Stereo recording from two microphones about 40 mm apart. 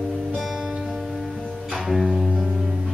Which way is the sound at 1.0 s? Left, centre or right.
Centre.